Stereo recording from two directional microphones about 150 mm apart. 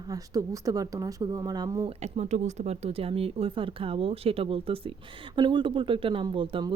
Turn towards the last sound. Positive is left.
turn(degrees=-35)  # may be behind; listen again after turning